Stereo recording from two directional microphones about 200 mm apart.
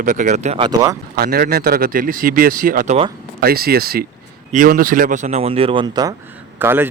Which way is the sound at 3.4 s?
50° right (ahead or behind).